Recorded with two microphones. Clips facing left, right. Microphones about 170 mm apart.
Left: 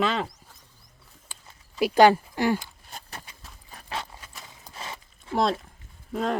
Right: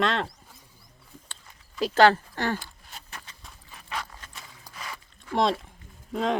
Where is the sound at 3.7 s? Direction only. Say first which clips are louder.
Left 1 dB; 35° left (ahead or behind).